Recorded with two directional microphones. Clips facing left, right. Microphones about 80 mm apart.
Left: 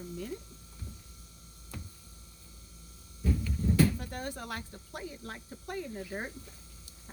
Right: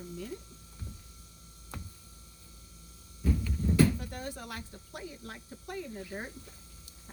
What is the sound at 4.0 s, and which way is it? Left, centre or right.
Speech, left.